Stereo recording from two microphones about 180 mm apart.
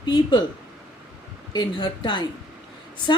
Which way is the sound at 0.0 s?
25° left (ahead or behind).